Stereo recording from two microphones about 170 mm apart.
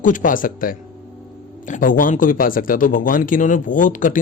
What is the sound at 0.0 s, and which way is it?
A man's voice, 50° left (ahead or behind).